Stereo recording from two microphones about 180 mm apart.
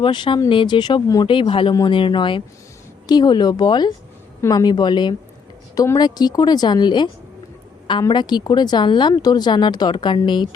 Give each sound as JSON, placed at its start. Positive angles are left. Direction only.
{"t": 0.0, "sound": "speech", "side_deg": 25}